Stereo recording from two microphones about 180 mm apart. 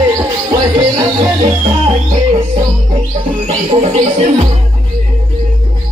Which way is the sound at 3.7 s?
35° right (ahead or behind).